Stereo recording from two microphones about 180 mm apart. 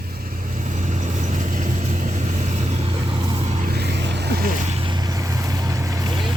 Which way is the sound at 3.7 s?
65° right (ahead or behind).